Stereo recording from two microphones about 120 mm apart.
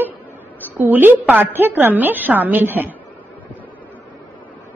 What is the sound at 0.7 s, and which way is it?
A woman's voice, 15° right (ahead or behind).